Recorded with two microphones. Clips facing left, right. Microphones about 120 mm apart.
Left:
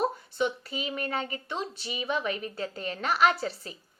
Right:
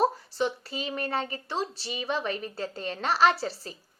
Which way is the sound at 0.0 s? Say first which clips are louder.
Right 2 dB; 35° right (ahead or behind).